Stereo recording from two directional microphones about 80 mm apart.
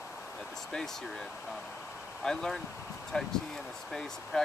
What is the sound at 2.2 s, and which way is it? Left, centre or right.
Speech, centre.